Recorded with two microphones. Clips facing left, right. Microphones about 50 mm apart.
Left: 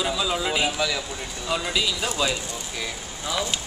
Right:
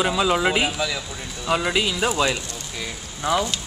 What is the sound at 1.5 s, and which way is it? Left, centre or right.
Speech, right.